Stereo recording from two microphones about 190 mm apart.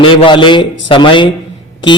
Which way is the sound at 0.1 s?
25° left (ahead or behind).